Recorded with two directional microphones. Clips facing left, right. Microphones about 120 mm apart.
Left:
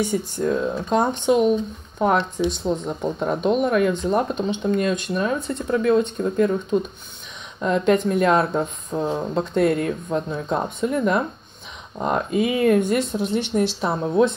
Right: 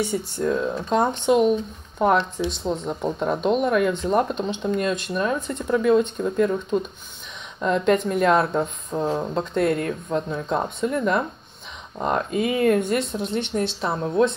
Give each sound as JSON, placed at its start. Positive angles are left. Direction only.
{"t": 0.4, "sound": "speech", "side_deg": 5}
{"t": 2.5, "sound": "speech", "side_deg": 5}